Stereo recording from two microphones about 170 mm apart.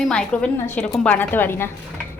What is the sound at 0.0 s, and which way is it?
A woman's voice, 5° left (ahead or behind).